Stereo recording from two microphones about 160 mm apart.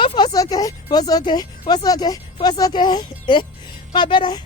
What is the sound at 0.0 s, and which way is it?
Speech, 30° left (ahead or behind).